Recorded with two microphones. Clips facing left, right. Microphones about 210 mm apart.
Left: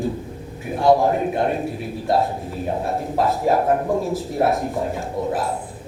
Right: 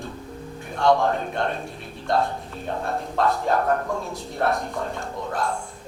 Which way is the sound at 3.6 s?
15° left (ahead or behind).